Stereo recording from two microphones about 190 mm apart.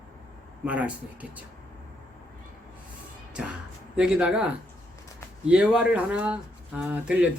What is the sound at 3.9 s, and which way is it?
Speech, 5° right (ahead or behind).